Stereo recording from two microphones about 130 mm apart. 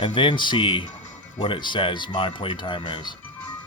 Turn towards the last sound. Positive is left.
turn(degrees=40)  # may be behind; listen again after turning